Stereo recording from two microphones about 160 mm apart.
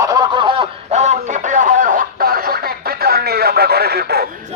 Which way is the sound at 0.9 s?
45° right (ahead or behind).